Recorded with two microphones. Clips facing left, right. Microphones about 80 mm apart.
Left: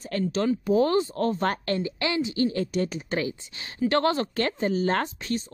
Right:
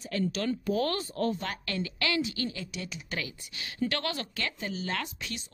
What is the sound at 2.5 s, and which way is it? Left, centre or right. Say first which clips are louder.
Speech: left 13 dB; left.